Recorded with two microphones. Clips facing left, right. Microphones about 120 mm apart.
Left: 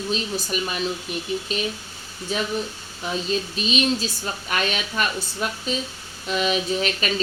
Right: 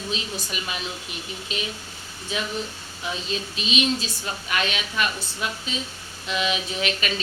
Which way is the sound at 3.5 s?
40° left (ahead or behind).